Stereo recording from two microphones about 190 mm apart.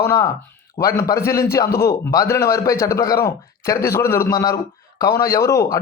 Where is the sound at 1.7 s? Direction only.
55° left (ahead or behind).